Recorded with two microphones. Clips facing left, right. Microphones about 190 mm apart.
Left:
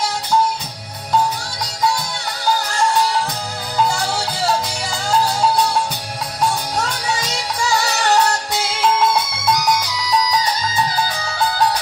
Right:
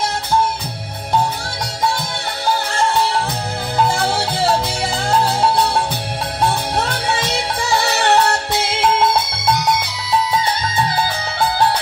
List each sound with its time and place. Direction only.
3.7 s music: 25° right (ahead or behind)
8.5 s music: 55° right (ahead or behind)
8.8 s music: 30° right (ahead or behind)